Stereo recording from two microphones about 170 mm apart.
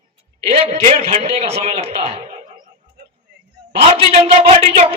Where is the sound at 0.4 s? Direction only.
35° right (ahead or behind).